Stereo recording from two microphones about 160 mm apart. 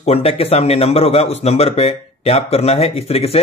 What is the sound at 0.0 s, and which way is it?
A man's voice, 40° left (ahead or behind).